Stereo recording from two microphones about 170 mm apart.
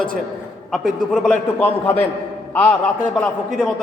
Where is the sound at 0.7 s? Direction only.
5° left (ahead or behind).